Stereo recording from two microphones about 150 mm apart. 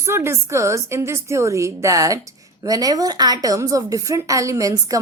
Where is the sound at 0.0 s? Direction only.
15° right (ahead or behind).